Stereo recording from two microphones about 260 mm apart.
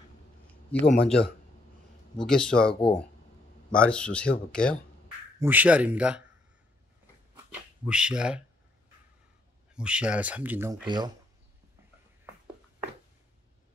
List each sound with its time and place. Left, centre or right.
0.7 s speech: centre
2.7 s speech: centre
3.7 s speech: centre
5.4 s speech: centre
7.8 s speech: centre
9.8 s speech: centre